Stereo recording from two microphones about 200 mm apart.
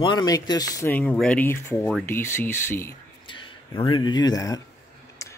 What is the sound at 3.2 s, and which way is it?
Speech, 25° left (ahead or behind).